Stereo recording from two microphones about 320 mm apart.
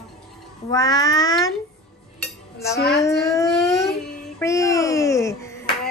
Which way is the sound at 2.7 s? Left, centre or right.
Left.